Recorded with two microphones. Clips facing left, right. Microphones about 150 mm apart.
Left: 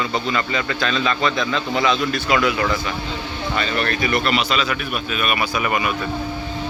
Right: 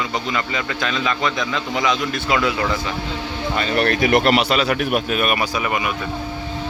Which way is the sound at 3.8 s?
80° right.